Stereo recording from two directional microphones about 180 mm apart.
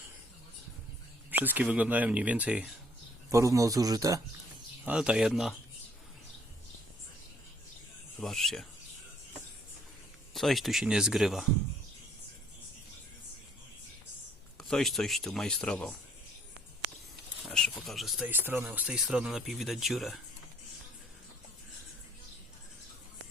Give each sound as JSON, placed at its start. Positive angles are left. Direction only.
{"t": 1.3, "sound": "speech", "side_deg": -10}
{"t": 4.9, "sound": "speech", "side_deg": -5}
{"t": 8.2, "sound": "speech", "side_deg": 0}
{"t": 10.3, "sound": "speech", "side_deg": 0}
{"t": 14.6, "sound": "speech", "side_deg": 0}
{"t": 17.5, "sound": "speech", "side_deg": 0}